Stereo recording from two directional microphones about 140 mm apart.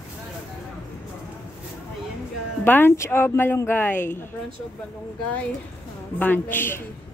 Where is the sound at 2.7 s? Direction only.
15° left (ahead or behind).